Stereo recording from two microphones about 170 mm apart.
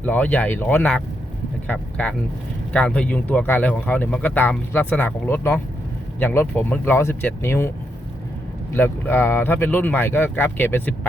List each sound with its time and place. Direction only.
0.0 s speech: 10° left (ahead or behind)
8.7 s speech: 10° left (ahead or behind)